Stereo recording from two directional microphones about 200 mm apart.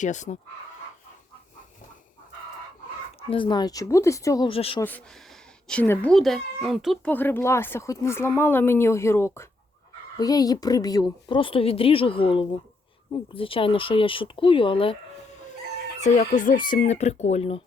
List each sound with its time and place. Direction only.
0.0 s speech: 35° left (ahead or behind)
3.2 s speech: 25° left (ahead or behind)
4.8 s speech: 10° left (ahead or behind); by 14.9 s 25° left (ahead or behind)
16.0 s speech: 40° left (ahead or behind)